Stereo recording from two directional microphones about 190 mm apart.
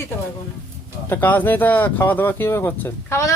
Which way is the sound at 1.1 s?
10° left (ahead or behind).